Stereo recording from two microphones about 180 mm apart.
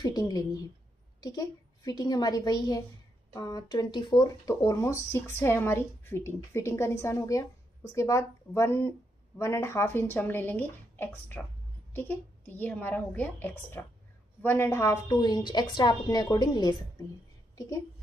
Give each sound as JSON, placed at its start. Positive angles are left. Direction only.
{"t": 0.0, "sound": "a woman's voice", "side_deg": 20}